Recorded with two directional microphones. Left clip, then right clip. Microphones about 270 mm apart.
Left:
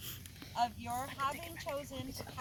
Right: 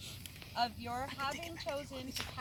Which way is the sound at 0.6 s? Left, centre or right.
Centre.